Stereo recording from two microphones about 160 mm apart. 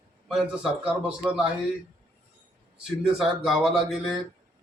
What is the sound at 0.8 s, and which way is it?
Speech, 5° right (ahead or behind).